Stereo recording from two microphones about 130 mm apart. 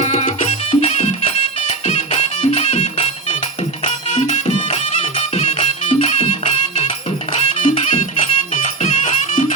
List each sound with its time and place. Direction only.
0.0 s music: 55° left (ahead or behind)
7.3 s music: 65° left (ahead or behind)